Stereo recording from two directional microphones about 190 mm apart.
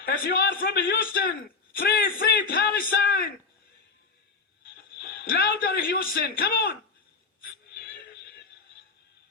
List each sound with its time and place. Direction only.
0.0 s a man's voice: 50° left (ahead or behind)
4.7 s a man's voice: 55° left (ahead or behind)
7.4 s a sound: 50° left (ahead or behind)